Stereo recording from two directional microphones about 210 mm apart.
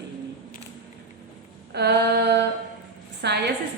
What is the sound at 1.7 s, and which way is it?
A woman's voice, 50° right (ahead or behind).